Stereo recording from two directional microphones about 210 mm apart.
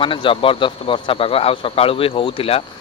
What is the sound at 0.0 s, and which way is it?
Speech, 25° left (ahead or behind).